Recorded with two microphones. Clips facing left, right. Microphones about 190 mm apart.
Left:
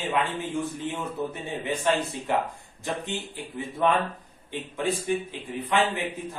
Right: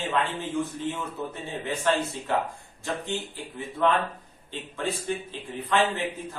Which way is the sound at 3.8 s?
15° left (ahead or behind).